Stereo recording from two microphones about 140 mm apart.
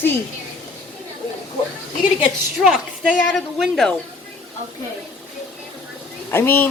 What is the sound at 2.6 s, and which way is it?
Speech, centre (ahead or behind).